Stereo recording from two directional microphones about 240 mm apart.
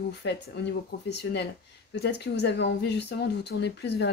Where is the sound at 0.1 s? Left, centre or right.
Left.